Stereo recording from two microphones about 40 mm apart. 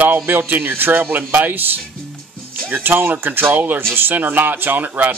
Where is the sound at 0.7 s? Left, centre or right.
Right.